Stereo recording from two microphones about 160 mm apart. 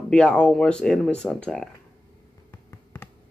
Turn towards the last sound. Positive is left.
turn(degrees=10)  # may be behind; listen again after turning